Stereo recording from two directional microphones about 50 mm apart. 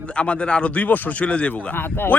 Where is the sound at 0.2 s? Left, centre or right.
Left.